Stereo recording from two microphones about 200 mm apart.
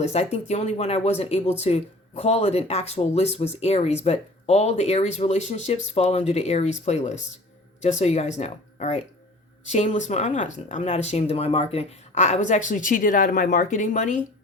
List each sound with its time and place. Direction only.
0.0 s speech: 35° left (ahead or behind)